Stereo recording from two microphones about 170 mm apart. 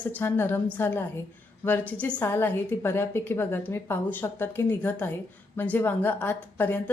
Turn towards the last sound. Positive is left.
turn(degrees=10)  # may be behind; listen again after turning